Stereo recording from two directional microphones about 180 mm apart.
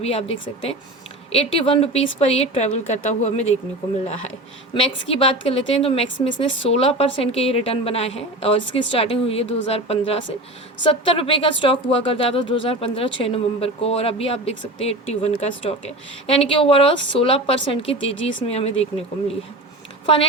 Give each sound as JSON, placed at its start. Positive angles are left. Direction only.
{"t": 0.0, "sound": "a woman's voice", "side_deg": 35}
{"t": 1.3, "sound": "a woman's voice", "side_deg": 35}
{"t": 4.7, "sound": "a woman's voice", "side_deg": 35}
{"t": 17.9, "sound": "speech", "side_deg": 90}
{"t": 18.4, "sound": "a woman's voice", "side_deg": 35}